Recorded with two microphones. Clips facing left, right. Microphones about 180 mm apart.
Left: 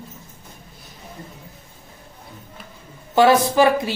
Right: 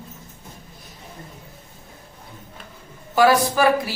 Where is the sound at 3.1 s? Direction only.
25° left (ahead or behind).